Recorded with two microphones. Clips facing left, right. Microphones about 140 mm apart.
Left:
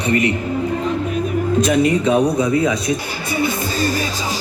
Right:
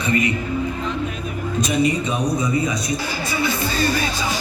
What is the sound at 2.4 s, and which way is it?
Speech, 60° left (ahead or behind).